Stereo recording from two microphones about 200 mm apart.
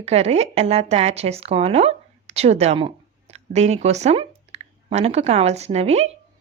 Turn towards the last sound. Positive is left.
turn(degrees=-30)  # may be behind; listen again after turning